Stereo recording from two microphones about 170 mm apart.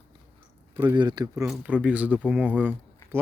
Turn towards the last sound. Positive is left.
turn(degrees=-10)  # may be behind; listen again after turning